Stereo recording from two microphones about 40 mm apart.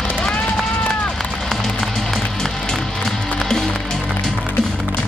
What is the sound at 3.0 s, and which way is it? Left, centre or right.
Music, centre.